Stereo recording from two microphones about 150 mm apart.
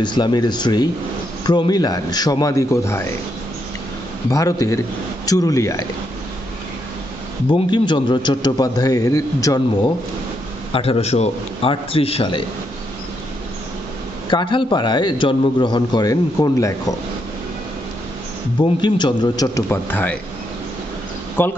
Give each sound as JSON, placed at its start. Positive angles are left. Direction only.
{"t": 0.0, "sound": "a man's voice", "side_deg": 30}
{"t": 4.3, "sound": "a man's voice", "side_deg": 20}
{"t": 7.4, "sound": "a man's voice", "side_deg": 30}
{"t": 10.7, "sound": "a man's voice", "side_deg": 40}
{"t": 14.3, "sound": "a man's voice", "side_deg": 35}
{"t": 18.6, "sound": "a man's voice", "side_deg": 30}
{"t": 21.4, "sound": "speech", "side_deg": 15}